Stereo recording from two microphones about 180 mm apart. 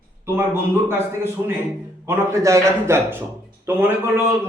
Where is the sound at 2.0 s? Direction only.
15° right (ahead or behind).